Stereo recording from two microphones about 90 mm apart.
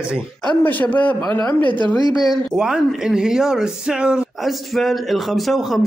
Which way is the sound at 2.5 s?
5° right (ahead or behind).